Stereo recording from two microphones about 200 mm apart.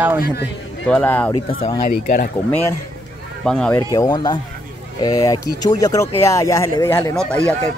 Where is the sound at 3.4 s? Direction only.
5° left (ahead or behind).